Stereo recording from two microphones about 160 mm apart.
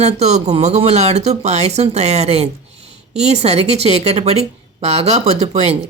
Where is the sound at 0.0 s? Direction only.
45° right (ahead or behind).